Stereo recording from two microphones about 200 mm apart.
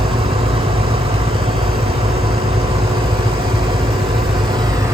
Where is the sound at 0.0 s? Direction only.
25° right (ahead or behind).